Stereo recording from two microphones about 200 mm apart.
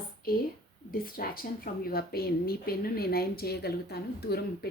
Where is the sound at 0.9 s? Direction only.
45° left (ahead or behind).